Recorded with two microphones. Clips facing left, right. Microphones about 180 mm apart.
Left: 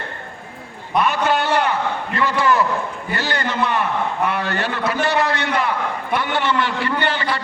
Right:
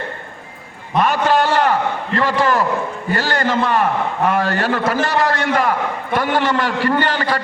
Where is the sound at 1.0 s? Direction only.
45° right (ahead or behind).